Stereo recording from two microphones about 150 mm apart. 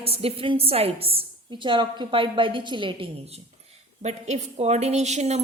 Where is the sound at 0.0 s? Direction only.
40° right (ahead or behind).